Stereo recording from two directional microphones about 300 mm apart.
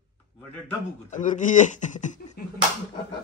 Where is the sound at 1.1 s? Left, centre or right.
Left.